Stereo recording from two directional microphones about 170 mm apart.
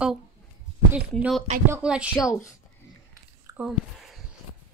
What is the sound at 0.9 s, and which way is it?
Speech, 5° right (ahead or behind).